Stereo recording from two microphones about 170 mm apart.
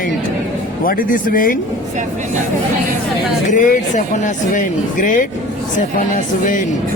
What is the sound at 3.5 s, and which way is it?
A man's voice, 50° left (ahead or behind).